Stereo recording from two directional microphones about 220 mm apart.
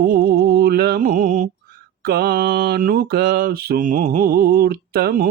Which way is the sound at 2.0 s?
45° right (ahead or behind).